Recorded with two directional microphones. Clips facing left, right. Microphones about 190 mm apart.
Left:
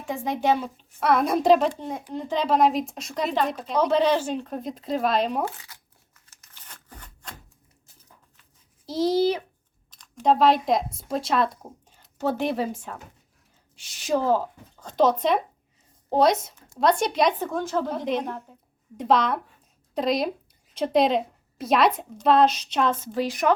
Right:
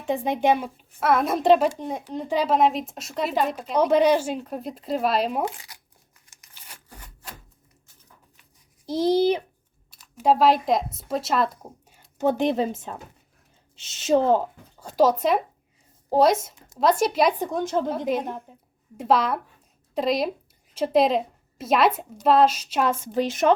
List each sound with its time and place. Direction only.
0.0 s a woman's voice: 20° right (ahead or behind)
5.4 s tearing: 15° right (ahead or behind)
8.9 s speech: 15° right (ahead or behind)
9.9 s speech: 5° right (ahead or behind)
14.8 s a woman's voice: 10° right (ahead or behind)
17.5 s speech: 20° right (ahead or behind)
17.9 s a woman's voice: 5° right (ahead or behind)
18.3 s speech: 15° right (ahead or behind)
18.9 s a woman's voice: 5° right (ahead or behind)
23.1 s speech: 20° right (ahead or behind)